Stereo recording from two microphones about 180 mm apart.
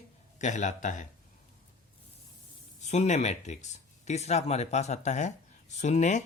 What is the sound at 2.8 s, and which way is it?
Speech, 40° left (ahead or behind).